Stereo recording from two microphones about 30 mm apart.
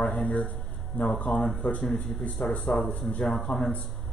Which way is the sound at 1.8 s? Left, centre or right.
Centre.